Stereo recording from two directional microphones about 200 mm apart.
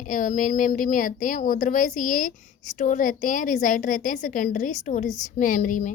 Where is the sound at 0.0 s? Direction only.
40° left (ahead or behind).